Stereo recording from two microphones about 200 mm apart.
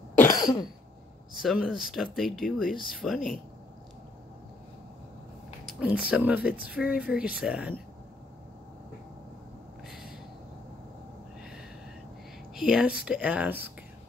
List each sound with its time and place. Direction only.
0.2 s cough: 20° left (ahead or behind)
1.3 s speech: centre (ahead or behind)
2.7 s speech: 45° left (ahead or behind)
3.0 s speech: centre (ahead or behind)
5.7 s a sound: 5° right (ahead or behind)
6.0 s speech: 5° right (ahead or behind)
9.8 s a sound: centre (ahead or behind)
12.5 s speech: 5° right (ahead or behind)